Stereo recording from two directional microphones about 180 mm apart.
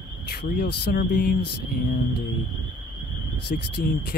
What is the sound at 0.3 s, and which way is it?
Speech, 55° left (ahead or behind).